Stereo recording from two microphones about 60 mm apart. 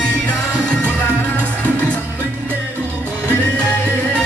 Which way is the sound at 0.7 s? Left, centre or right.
Left.